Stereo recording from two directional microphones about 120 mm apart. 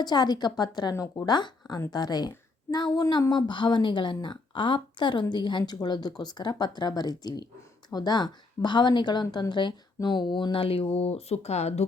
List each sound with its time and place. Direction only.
0.0 s a woman's voice: 35° left (ahead or behind); by 11.9 s 65° left (ahead or behind)